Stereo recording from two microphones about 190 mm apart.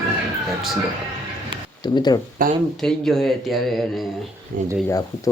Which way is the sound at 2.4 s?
50° right (ahead or behind).